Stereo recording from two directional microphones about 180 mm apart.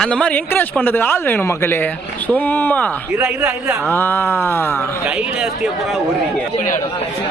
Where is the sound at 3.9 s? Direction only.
15° left (ahead or behind).